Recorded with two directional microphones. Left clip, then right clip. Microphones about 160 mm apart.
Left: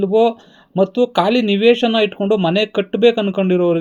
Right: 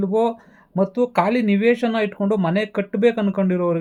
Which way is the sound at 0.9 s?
50° left (ahead or behind).